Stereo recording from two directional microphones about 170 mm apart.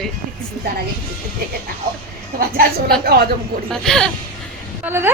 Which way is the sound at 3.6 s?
5° left (ahead or behind).